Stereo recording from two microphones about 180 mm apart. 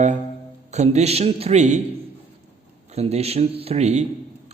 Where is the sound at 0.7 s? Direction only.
40° right (ahead or behind).